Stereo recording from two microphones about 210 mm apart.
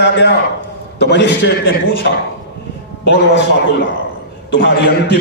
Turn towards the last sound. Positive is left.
turn(degrees=55)  # may be behind; listen again after turning